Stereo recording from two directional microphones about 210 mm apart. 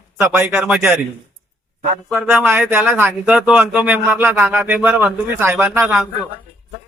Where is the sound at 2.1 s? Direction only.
5° right (ahead or behind).